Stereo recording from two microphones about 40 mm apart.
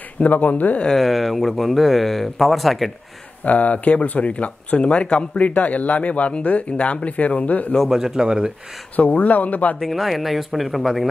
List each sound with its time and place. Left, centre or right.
0.2 s speech: left
0.9 s speech: centre
3.4 s speech: left
7.9 s speech: centre
8.9 s speech: left
9.8 s speech: centre